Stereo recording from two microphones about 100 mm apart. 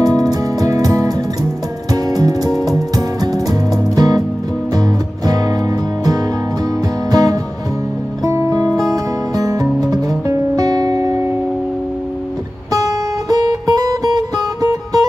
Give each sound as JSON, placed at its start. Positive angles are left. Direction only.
{"t": 0.0, "sound": "music", "side_deg": -35}
{"t": 12.7, "sound": "music", "side_deg": -35}